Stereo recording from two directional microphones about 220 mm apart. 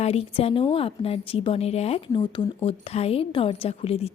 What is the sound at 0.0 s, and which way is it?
A woman's voice, 30° left (ahead or behind).